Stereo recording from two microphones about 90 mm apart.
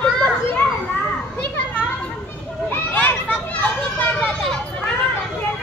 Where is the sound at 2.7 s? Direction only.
20° left (ahead or behind).